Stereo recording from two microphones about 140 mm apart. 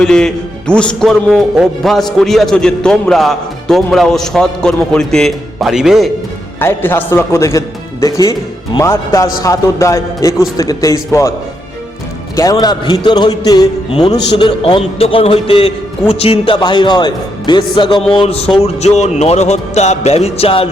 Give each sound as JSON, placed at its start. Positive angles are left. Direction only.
{"t": 0.0, "sound": "a man's voice", "side_deg": 5}
{"t": 6.6, "sound": "a man's voice", "side_deg": 15}
{"t": 12.4, "sound": "a man's voice", "side_deg": 25}
{"t": 18.1, "sound": "music", "side_deg": 40}